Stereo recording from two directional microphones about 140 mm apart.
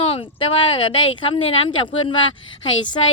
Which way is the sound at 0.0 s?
45° left (ahead or behind).